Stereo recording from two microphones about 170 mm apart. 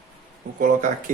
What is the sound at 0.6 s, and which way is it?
Speech, 50° right (ahead or behind).